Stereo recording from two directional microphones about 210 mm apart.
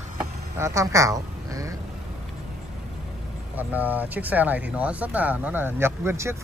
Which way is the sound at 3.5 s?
10° right (ahead or behind).